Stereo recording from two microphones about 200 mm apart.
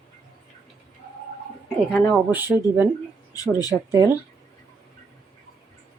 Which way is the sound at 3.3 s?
20° left (ahead or behind).